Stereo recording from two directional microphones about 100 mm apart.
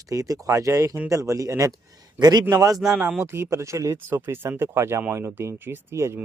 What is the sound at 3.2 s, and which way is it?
Speech, 25° right (ahead or behind).